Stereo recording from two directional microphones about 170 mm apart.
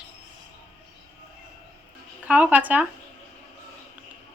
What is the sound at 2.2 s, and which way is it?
Speech, 10° right (ahead or behind).